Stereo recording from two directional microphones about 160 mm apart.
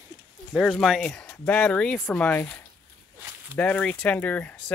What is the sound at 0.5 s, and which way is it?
Speech, centre (ahead or behind).